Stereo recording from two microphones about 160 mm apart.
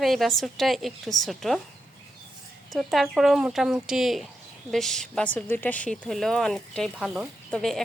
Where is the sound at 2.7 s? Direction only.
Centre (ahead or behind).